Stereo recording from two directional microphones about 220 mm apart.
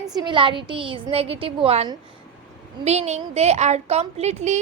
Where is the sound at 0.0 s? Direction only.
20° right (ahead or behind).